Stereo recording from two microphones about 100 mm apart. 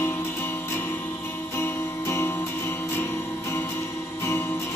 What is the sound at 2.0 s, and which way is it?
Music, 25° left (ahead or behind).